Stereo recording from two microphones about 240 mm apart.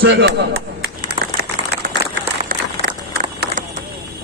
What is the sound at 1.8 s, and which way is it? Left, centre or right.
Applause, right.